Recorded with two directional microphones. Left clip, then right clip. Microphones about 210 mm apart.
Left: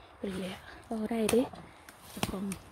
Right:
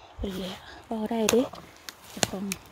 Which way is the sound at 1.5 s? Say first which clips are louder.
Right 6 dB; 40° right (ahead or behind).